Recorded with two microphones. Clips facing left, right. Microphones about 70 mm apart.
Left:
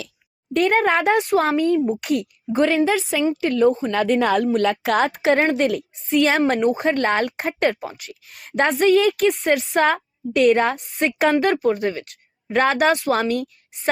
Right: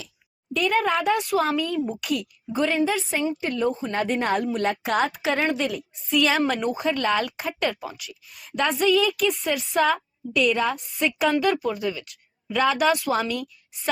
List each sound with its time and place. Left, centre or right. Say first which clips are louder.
0.5 s a woman's voice: left 5 dB; left
4.5 s a woman's voice: left 5 dB; left
8.3 s a woman's voice: left 5 dB; left